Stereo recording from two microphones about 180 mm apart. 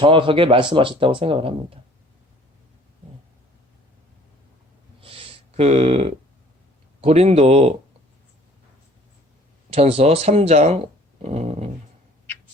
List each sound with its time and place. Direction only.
0.0 s speech: 30° right (ahead or behind)
4.9 s a sound: 30° right (ahead or behind)
7.0 s speech: 35° right (ahead or behind)
9.6 s speech: 35° right (ahead or behind)